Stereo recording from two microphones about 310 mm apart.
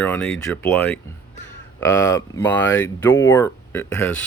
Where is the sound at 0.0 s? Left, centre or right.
Centre.